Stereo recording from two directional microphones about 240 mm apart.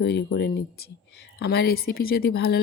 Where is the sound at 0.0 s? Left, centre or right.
Left.